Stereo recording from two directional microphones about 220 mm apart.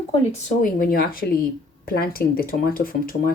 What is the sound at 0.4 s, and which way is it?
Speech, 40° left (ahead or behind).